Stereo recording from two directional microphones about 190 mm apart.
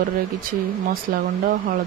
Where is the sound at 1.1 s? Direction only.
50° right (ahead or behind).